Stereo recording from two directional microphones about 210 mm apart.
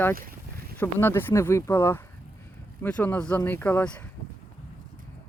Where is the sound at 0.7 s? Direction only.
10° left (ahead or behind).